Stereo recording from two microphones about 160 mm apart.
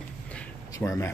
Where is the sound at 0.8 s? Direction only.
20° left (ahead or behind).